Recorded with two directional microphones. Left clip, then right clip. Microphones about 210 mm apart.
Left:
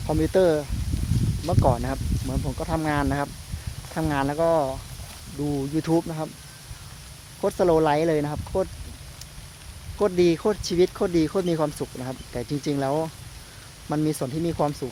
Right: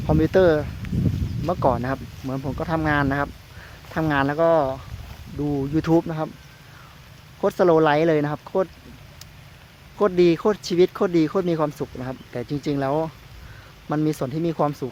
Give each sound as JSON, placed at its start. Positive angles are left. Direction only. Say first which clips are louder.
{"t": 0.1, "sound": "speech", "louder": "right 3 dB", "side_deg": -20}
{"t": 7.4, "sound": "speech", "louder": "right 3 dB", "side_deg": -20}
{"t": 10.0, "sound": "speech", "louder": "right 3 dB", "side_deg": -15}